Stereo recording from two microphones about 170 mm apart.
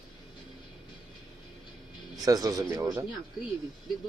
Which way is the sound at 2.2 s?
20° right (ahead or behind).